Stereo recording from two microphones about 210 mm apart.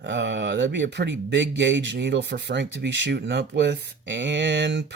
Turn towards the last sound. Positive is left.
turn(degrees=-55)  # may be behind; listen again after turning